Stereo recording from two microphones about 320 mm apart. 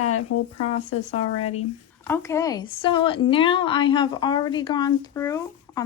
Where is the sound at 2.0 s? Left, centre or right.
Centre.